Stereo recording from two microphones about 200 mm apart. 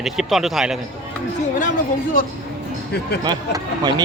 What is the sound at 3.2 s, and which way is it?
Speech, 20° right (ahead or behind).